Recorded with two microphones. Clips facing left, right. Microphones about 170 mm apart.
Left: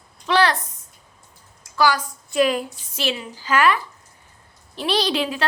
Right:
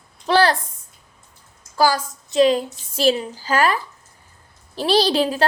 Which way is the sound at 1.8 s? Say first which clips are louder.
Right 1 dB; 35° right (ahead or behind).